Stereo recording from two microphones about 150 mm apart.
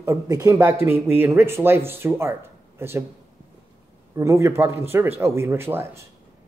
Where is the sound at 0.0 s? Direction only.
20° right (ahead or behind).